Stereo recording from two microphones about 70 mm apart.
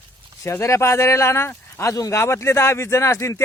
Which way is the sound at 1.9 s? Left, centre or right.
Left.